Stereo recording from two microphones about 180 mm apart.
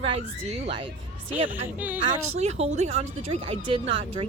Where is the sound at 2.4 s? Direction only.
35° right (ahead or behind).